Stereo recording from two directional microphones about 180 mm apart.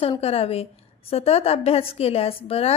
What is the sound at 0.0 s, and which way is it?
A woman's voice, 35° left (ahead or behind).